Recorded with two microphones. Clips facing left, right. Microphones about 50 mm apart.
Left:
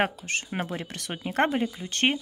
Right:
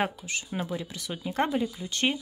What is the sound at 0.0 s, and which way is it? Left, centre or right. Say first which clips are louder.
Speech: left 3 dB; left.